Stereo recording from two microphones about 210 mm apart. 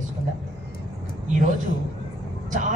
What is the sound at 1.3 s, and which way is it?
A man's voice, 35° right (ahead or behind).